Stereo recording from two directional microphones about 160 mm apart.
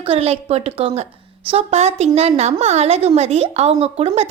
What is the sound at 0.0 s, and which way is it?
A woman's voice, 40° right (ahead or behind).